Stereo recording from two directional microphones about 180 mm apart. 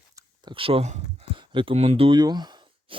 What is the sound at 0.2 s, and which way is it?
Speech, 25° right (ahead or behind).